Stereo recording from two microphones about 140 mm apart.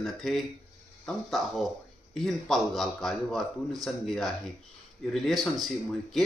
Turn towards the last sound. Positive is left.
turn(degrees=0)  # may be behind; listen again after turning